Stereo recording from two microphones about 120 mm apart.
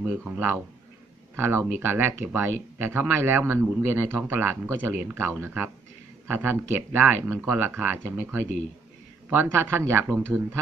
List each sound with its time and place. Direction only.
0.0 s speech: 10° right (ahead or behind)